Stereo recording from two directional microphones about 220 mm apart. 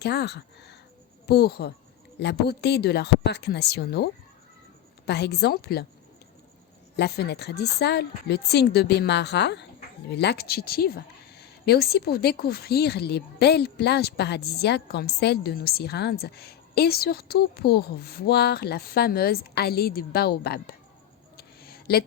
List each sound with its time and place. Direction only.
0.0 s speech: 50° left (ahead or behind)
6.9 s speech: 50° left (ahead or behind)
21.3 s a sound: 45° left (ahead or behind)